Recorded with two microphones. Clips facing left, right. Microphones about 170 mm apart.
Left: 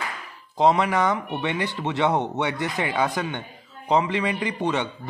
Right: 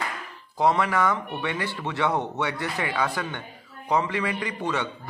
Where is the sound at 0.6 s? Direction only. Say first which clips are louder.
Left 3 dB; 20° left (ahead or behind).